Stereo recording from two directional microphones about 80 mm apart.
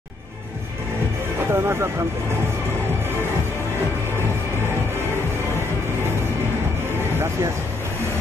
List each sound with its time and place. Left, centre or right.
1.5 s speech: right